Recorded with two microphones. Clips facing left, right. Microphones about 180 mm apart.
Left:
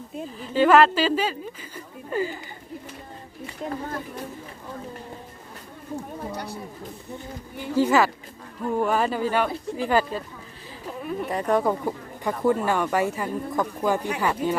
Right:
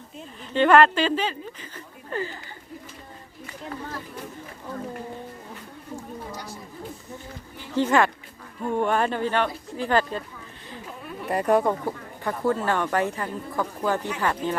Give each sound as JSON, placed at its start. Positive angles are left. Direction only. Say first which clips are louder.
{"t": 0.5, "sound": "speech", "louder": "even", "side_deg": 5}
{"t": 6.3, "sound": "a sound", "louder": "left 4 dB", "side_deg": 60}
{"t": 7.8, "sound": "speech", "louder": "left 1 dB", "side_deg": 5}
{"t": 11.3, "sound": "speech", "louder": "right 2 dB", "side_deg": -5}
{"t": 11.7, "sound": "speech", "louder": "left 1 dB", "side_deg": 10}